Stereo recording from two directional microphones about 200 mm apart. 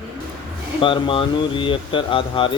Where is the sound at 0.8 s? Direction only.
25° left (ahead or behind).